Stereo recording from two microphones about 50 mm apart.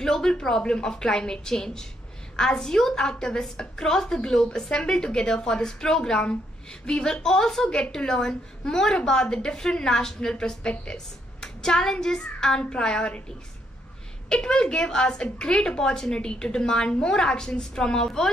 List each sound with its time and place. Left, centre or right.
0.0 s a woman's voice: centre
14.3 s a woman's voice: centre